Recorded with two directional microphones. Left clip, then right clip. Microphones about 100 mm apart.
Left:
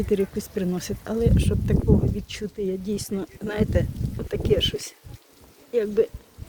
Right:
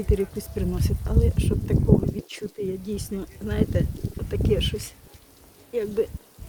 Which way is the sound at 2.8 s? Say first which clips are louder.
Left 3 dB; 40° left (ahead or behind).